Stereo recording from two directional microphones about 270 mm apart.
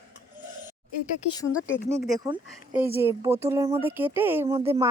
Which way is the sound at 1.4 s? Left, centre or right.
Centre.